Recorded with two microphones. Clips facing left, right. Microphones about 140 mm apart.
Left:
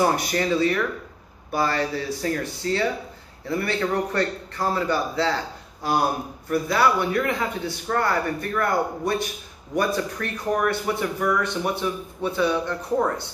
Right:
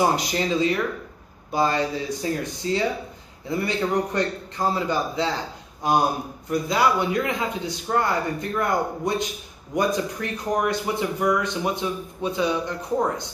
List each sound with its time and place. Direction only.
0.0 s speech: 20° right (ahead or behind)